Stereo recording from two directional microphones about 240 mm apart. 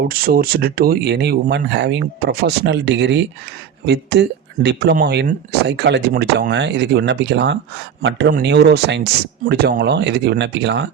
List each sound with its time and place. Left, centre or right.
0.1 s speech: right